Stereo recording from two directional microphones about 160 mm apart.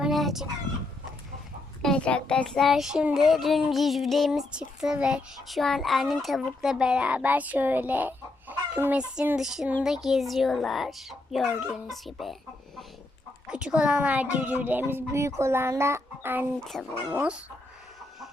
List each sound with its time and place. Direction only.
0.0 s chicken: centre (ahead or behind)
1.8 s a child's voice: 5° left (ahead or behind)
13.5 s a child's voice: 5° right (ahead or behind)
16.6 s a child's voice: centre (ahead or behind)
17.1 s a child's voice: 10° right (ahead or behind)